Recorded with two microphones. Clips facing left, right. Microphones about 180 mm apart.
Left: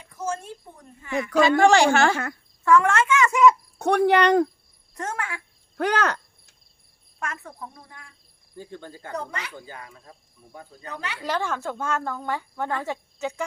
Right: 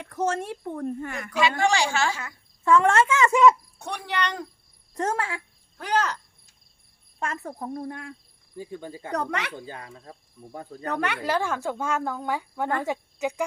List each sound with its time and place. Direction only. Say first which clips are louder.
0.0 s a woman's voice: right 4 dB; 70° right (ahead or behind); by 1.3 s 55° right (ahead or behind)
1.3 s speech: left 6 dB; 45° left (ahead or behind)
2.6 s speech: even; 30° right (ahead or behind)
3.8 s speech: left 11 dB; 55° left (ahead or behind)
4.9 s speech: right 4 dB; 30° right (ahead or behind)
5.7 s cricket: left 3 dB; 65° left (ahead or behind)
7.2 s speech: right 3 dB; 35° right (ahead or behind); by 8.1 s 60° right (ahead or behind)
8.5 s speech: right 3 dB; 5° right (ahead or behind)
9.1 s a woman's voice: right 4 dB; 70° right (ahead or behind)
9.6 s speech: right 2 dB; 30° right (ahead or behind)
10.8 s speech: right 8 dB; 60° right (ahead or behind)
11.2 s speech: right 1 dB; 10° right (ahead or behind)